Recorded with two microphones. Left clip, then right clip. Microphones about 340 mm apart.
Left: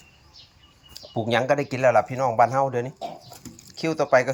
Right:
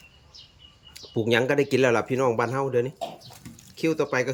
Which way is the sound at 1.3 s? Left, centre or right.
Centre.